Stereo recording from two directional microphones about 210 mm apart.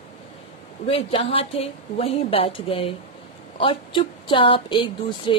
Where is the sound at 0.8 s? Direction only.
25° left (ahead or behind).